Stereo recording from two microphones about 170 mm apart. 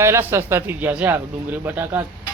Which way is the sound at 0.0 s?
15° right (ahead or behind).